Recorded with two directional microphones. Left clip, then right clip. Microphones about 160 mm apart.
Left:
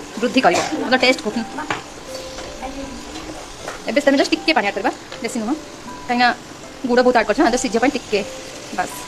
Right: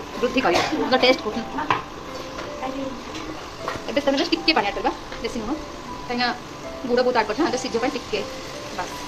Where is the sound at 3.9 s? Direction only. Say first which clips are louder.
Left 6 dB; 90° left.